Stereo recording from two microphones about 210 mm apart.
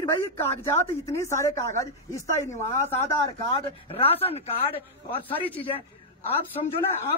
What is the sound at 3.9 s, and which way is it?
Speech, 25° left (ahead or behind).